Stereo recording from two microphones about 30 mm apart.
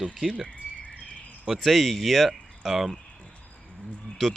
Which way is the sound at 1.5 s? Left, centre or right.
Centre.